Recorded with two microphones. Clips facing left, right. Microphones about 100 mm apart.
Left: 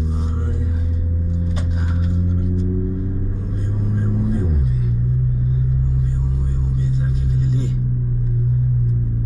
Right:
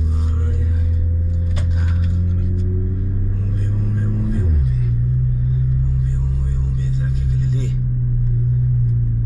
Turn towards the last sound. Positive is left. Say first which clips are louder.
# left 1 dB
turn(degrees=0)  # may be behind; listen again after turning